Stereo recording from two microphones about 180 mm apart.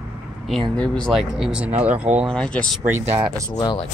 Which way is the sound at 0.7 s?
5° left (ahead or behind).